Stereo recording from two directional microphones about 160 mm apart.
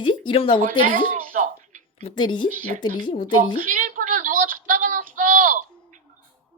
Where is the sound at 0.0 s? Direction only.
30° left (ahead or behind).